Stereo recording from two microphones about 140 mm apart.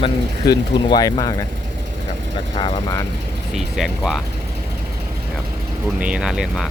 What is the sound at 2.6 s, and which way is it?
Speech, 30° left (ahead or behind).